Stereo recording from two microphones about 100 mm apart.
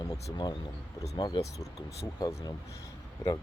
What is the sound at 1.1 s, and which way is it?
Speech, 45° left (ahead or behind).